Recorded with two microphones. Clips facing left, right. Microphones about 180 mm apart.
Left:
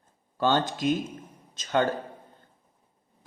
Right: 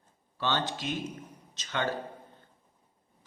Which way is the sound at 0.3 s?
45° left (ahead or behind).